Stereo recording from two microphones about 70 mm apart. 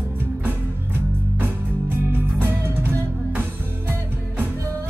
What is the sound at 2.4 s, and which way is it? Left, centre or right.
Music, right.